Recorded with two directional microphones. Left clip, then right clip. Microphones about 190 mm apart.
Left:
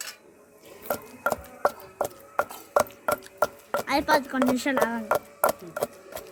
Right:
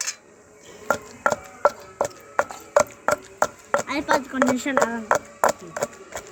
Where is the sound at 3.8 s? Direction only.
35° left (ahead or behind).